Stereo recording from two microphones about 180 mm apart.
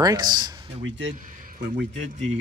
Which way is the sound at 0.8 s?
90° right.